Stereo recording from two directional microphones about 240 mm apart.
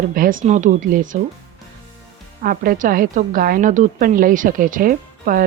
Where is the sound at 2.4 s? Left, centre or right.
Right.